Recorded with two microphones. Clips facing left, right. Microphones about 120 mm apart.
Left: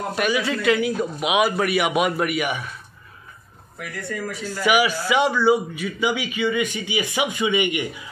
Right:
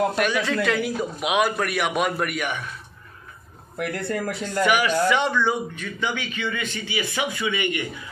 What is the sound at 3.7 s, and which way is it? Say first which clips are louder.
Speech: right 5 dB; 65° right (ahead or behind).